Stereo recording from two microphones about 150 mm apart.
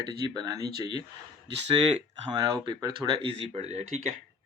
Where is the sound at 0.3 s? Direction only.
25° right (ahead or behind).